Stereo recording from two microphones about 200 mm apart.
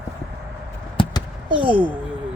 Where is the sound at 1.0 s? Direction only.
25° left (ahead or behind).